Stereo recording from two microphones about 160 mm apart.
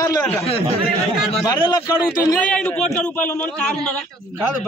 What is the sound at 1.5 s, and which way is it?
Speech, 25° left (ahead or behind).